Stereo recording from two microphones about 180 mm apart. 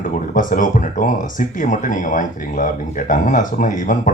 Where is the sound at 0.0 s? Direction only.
45° left (ahead or behind).